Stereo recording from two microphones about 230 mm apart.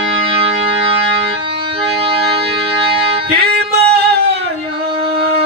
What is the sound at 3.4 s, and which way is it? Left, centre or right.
Music, right.